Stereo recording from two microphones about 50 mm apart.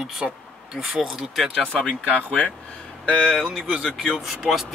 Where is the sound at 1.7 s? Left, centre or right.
Left.